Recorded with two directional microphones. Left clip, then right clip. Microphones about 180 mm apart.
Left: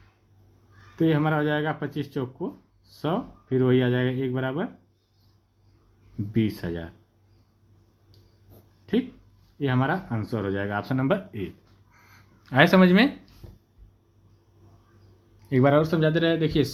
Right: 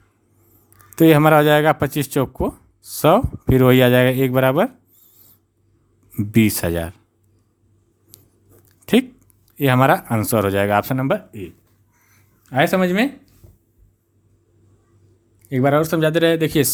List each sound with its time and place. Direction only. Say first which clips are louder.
0.9 s speech: right 12 dB; 55° right (ahead or behind)
6.3 s speech: right 10 dB; 55° right (ahead or behind)
9.6 s speech: right 11 dB; 55° right (ahead or behind)
10.9 s speech: right 5 dB; 30° right (ahead or behind)
12.4 s speech: right 1 dB; 10° right (ahead or behind)
15.4 s speech: right 3 dB; 20° right (ahead or behind)
15.7 s speech: right 5 dB; 45° right (ahead or behind)